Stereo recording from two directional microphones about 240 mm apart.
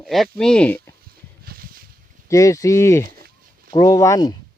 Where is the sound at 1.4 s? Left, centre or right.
Right.